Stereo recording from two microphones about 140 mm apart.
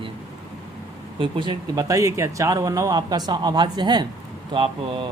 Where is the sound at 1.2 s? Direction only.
35° right (ahead or behind).